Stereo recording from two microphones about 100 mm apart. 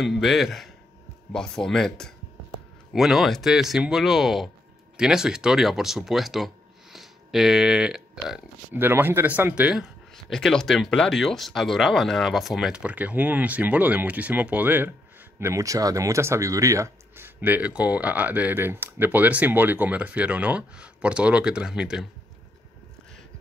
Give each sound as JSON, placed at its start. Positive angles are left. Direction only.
{"t": 0.0, "sound": "speech", "side_deg": 0}
{"t": 8.7, "sound": "speech", "side_deg": -20}
{"t": 10.1, "sound": "speech", "side_deg": 5}
{"t": 17.4, "sound": "speech", "side_deg": -15}